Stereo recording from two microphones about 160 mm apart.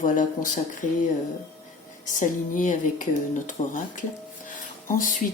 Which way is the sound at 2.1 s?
55° left (ahead or behind).